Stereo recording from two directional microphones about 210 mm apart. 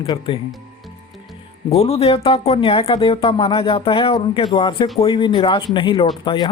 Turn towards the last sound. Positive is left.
turn(degrees=20)  # may be behind; listen again after turning